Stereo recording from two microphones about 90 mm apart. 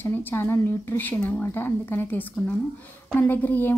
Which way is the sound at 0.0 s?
25° left (ahead or behind).